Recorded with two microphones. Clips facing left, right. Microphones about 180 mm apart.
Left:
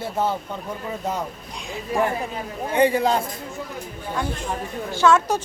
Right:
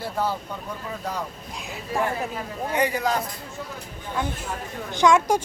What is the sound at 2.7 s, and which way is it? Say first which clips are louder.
Speech: left 5 dB; 30° left (ahead or behind).